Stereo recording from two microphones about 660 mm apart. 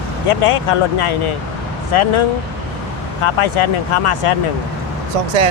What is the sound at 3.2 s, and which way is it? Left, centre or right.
Speech, left.